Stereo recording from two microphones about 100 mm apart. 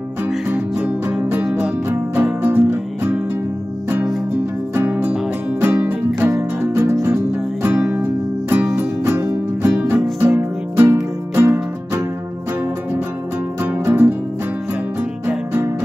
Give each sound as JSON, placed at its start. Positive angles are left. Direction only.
{"t": 0.5, "sound": "music", "side_deg": -15}
{"t": 5.6, "sound": "music", "side_deg": -20}
{"t": 13.6, "sound": "music", "side_deg": -20}
{"t": 15.2, "sound": "music", "side_deg": -20}